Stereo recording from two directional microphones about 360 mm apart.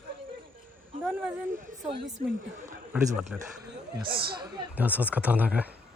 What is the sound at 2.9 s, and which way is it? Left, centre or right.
Speech, centre.